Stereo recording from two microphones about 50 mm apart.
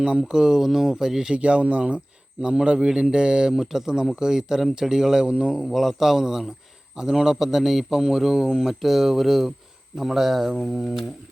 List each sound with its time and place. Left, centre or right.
0.0 s speech: centre
1.3 s a man's voice: right
5.7 s a man's voice: centre